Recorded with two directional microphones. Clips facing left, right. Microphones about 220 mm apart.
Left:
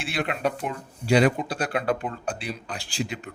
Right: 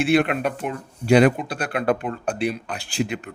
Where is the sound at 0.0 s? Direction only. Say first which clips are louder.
Right 8 dB; 60° right (ahead or behind).